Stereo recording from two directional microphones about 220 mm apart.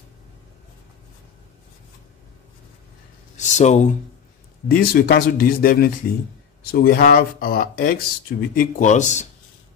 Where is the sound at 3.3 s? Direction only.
30° left (ahead or behind).